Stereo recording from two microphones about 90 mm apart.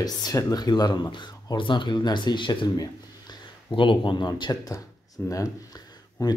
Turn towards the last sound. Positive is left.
turn(degrees=40)  # may be behind; listen again after turning